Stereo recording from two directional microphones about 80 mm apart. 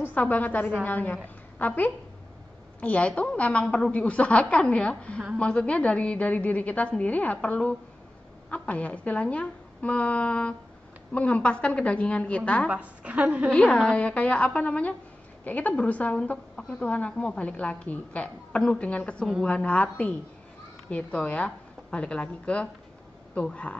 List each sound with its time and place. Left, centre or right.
0.1 s a woman's voice: left
12.6 s a woman's voice: centre
13.5 s a woman's voice: centre